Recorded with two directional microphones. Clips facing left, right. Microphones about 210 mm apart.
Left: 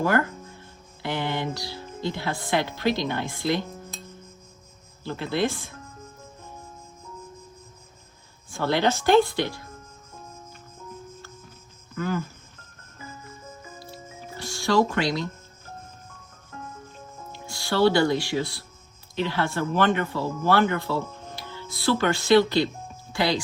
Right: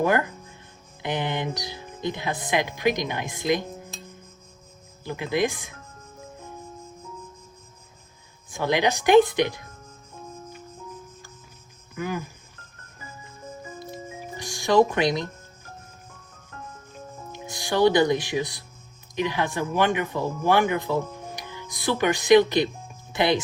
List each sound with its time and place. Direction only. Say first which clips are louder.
0.0 s speech: right 1 dB; 20° right (ahead or behind)
5.0 s speech: right 1 dB; 15° right (ahead or behind)
8.4 s speech: even; 15° right (ahead or behind)
11.9 s speech: left 2 dB; 15° right (ahead or behind)
13.8 s music: right 4 dB; 15° right (ahead or behind)
17.3 s speech: right 1 dB; 20° right (ahead or behind)